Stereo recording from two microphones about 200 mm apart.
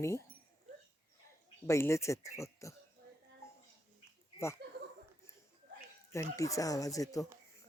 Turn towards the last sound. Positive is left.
turn(degrees=15)  # may be behind; listen again after turning